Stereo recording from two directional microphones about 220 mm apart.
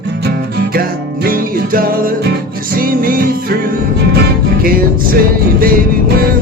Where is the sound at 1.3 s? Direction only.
40° right (ahead or behind).